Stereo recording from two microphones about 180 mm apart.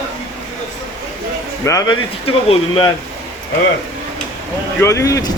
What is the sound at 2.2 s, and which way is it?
Speech, 30° left (ahead or behind).